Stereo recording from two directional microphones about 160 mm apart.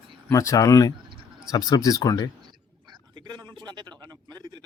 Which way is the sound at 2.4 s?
25° right (ahead or behind).